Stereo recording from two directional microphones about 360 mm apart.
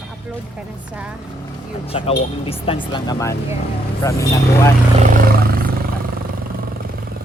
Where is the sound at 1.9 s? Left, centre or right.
Centre.